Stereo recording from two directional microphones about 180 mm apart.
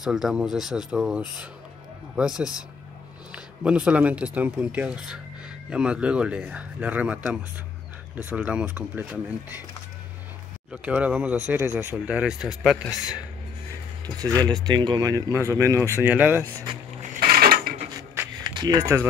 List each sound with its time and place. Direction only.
0.0 s speech: centre (ahead or behind)
8.2 s speech: 10° right (ahead or behind)
10.7 s speech: 5° right (ahead or behind)
14.0 s speech: 20° right (ahead or behind)
17.0 s mechanisms: 50° right (ahead or behind)
18.4 s speech: 25° right (ahead or behind)